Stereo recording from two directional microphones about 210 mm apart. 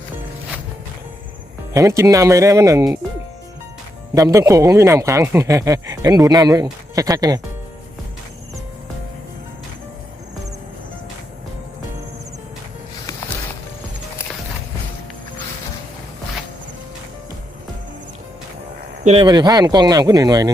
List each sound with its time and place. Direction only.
1.7 s speech: 15° right (ahead or behind)
4.1 s speech: 15° right (ahead or behind)
19.0 s speech: 25° right (ahead or behind)